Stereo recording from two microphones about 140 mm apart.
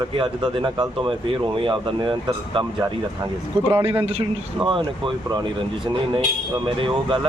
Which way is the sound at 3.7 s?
15° right (ahead or behind).